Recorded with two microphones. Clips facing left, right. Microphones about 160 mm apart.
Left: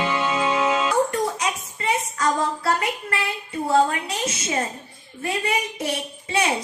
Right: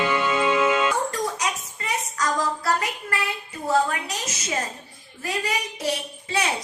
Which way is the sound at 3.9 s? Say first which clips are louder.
Left 3 dB; 25° left (ahead or behind).